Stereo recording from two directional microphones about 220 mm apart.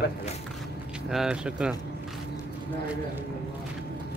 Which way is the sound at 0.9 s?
5° right (ahead or behind).